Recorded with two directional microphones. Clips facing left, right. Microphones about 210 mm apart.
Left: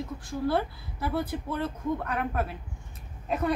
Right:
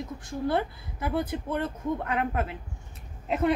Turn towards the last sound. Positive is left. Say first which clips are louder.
# right 3 dB
turn(degrees=-25)  # may be behind; listen again after turning